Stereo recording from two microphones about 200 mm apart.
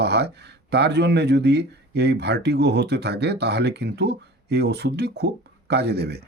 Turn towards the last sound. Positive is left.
turn(degrees=-55)  # may be behind; listen again after turning